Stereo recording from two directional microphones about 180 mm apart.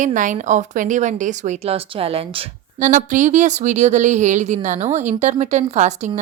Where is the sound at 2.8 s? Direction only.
45° right (ahead or behind).